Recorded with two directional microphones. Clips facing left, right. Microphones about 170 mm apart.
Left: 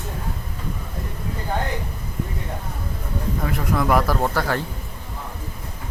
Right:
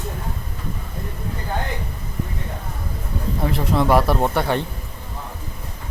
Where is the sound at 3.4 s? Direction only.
30° right (ahead or behind).